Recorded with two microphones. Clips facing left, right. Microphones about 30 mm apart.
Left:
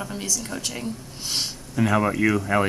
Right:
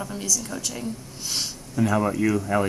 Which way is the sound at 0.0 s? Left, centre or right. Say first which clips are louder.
Right 1 dB; left.